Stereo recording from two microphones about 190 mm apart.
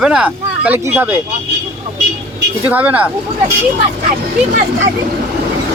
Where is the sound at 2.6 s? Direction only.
10° right (ahead or behind).